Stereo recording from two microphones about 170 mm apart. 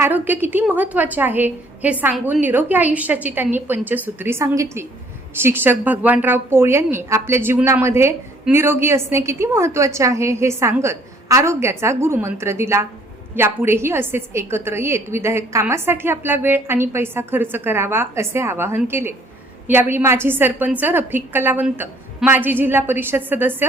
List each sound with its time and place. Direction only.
0.0 s a woman's voice: 10° right (ahead or behind)